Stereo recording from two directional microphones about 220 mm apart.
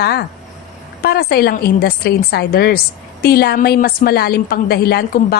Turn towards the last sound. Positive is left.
turn(degrees=45)  # may be behind; listen again after turning